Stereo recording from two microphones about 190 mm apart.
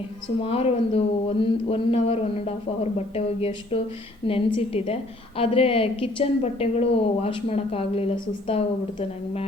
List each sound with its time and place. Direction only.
0.4 s a woman's voice: 30° left (ahead or behind)